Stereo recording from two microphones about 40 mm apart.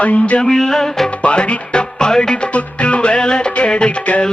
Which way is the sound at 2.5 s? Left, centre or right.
Left.